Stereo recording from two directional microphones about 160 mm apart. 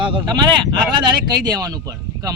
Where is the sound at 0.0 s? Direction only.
30° right (ahead or behind).